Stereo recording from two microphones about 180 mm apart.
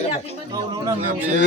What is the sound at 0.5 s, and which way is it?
Speech, 20° right (ahead or behind).